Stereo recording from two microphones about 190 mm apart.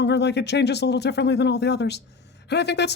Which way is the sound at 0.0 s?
65° left (ahead or behind).